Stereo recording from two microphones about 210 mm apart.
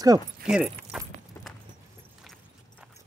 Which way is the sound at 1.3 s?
10° left (ahead or behind).